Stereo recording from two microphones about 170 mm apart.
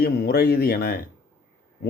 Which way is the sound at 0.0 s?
65° left (ahead or behind).